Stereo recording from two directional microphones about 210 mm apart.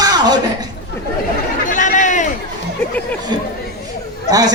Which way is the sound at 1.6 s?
35° left (ahead or behind).